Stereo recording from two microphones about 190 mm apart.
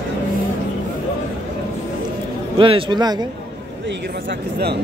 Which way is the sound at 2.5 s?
25° right (ahead or behind).